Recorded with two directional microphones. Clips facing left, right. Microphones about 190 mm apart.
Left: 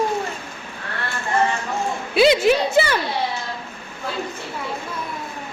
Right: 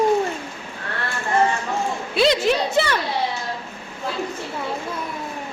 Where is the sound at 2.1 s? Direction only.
5° left (ahead or behind).